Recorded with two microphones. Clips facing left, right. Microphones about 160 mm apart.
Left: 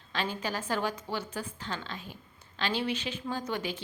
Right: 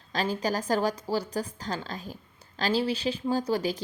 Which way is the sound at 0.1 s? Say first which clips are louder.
Right 5 dB; 40° right (ahead or behind).